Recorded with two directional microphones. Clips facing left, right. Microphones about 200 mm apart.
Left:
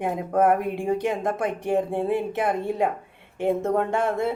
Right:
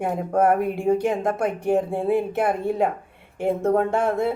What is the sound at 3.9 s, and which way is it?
Speech, centre (ahead or behind).